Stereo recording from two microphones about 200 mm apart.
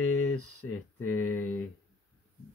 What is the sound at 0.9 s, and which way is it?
Speech, 10° left (ahead or behind).